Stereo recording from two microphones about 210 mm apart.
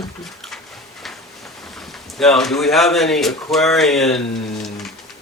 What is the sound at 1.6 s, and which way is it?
Speech, centre (ahead or behind).